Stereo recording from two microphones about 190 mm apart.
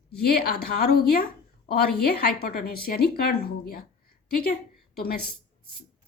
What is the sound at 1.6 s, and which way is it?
A woman's voice, 55° left (ahead or behind).